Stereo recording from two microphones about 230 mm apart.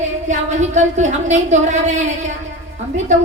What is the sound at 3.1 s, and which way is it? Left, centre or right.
Speech, right.